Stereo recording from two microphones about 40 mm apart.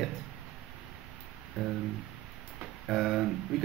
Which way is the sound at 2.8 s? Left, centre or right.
Centre.